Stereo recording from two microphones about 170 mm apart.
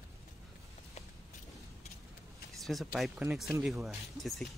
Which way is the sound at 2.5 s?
Centre (ahead or behind).